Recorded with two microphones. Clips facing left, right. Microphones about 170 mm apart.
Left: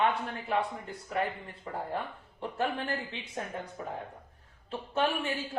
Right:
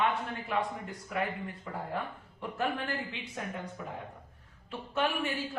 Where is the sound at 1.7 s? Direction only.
35° left (ahead or behind).